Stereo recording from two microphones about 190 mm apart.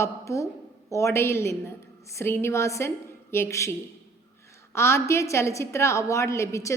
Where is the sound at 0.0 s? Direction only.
15° left (ahead or behind).